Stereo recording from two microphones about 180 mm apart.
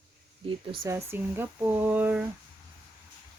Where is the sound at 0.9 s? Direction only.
15° right (ahead or behind).